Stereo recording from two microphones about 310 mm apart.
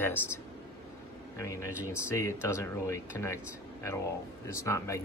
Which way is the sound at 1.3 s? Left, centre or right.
Centre.